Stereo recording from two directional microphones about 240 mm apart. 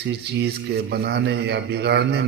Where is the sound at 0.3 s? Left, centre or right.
Right.